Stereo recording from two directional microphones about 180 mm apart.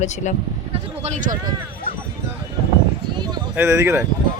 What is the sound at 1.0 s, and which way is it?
Speech, 40° right (ahead or behind).